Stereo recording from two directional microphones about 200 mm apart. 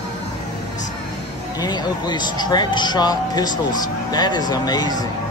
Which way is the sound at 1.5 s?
20° left (ahead or behind).